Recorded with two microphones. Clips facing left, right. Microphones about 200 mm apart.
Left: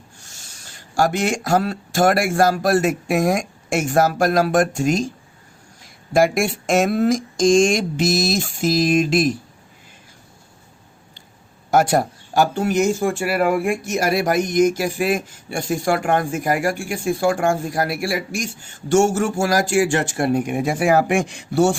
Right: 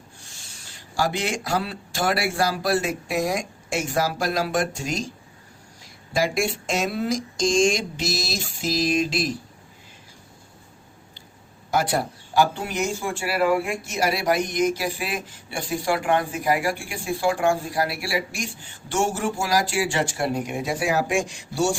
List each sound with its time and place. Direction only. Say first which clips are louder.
0.2 s speech: left 1 dB; 45° left (ahead or behind)
6.1 s speech: left 6 dB; 50° left (ahead or behind)
11.7 s speech: left 7 dB; 45° left (ahead or behind)